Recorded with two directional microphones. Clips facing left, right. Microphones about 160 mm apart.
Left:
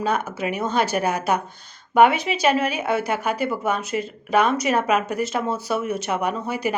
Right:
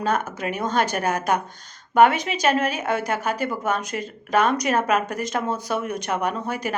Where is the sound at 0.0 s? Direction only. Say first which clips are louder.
Left 1 dB; 10° left (ahead or behind).